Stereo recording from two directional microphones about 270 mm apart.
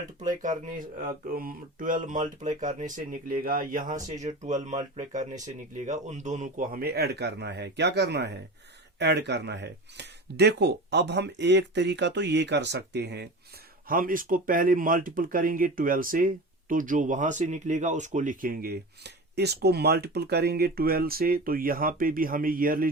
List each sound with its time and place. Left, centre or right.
0.2 s speech: right